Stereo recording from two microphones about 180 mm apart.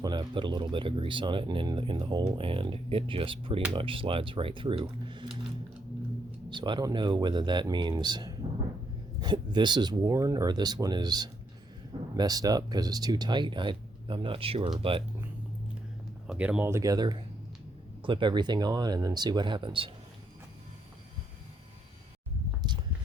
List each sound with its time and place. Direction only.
0.0 s speech: 25° right (ahead or behind)
6.5 s speech: 25° right (ahead or behind)
16.2 s speech: 5° right (ahead or behind); by 19.9 s 30° right (ahead or behind)
22.7 s a sound: 25° right (ahead or behind)